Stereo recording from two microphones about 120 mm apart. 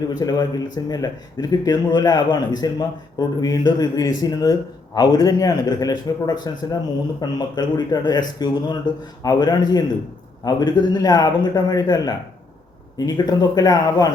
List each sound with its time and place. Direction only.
0.1 s speech: 35° left (ahead or behind)